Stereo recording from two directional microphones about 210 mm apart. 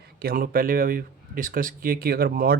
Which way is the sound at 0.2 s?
45° right (ahead or behind).